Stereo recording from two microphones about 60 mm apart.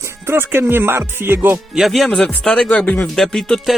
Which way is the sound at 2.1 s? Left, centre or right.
Centre.